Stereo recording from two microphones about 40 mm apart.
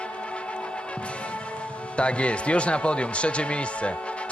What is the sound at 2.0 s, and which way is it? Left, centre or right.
A man's voice, left.